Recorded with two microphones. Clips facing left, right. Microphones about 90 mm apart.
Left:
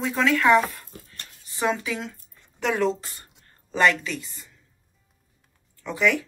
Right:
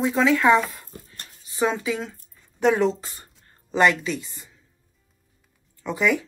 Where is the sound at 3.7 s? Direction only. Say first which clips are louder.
Right 2 dB; 20° right (ahead or behind).